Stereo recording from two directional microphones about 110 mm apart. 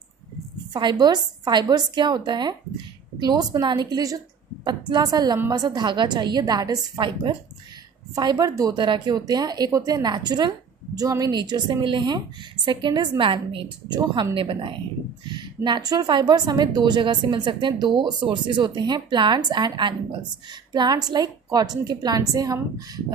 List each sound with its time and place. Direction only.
0.7 s a woman's voice: 45° right (ahead or behind)
8.7 s a woman's voice: 45° right (ahead or behind)